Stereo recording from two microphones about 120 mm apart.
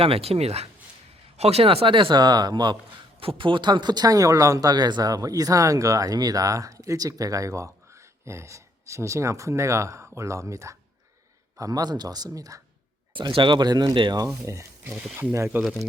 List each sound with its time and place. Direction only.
0.0 s speech: 55° right (ahead or behind); by 2.7 s 35° right (ahead or behind)
3.2 s speech: 50° right (ahead or behind); by 12.6 s 30° right (ahead or behind)
13.1 s speech: 45° right (ahead or behind)
14.4 s speech: 25° right (ahead or behind)
15.6 s speech: centre (ahead or behind)